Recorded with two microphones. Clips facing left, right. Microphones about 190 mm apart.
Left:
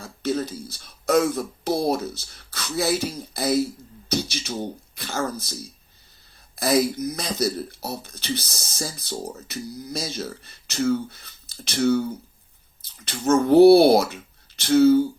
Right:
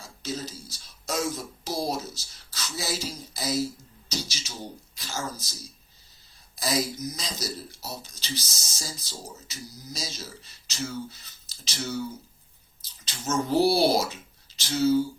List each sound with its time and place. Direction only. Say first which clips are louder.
0.0 s a man's voice: left 9 dB; 60° left (ahead or behind)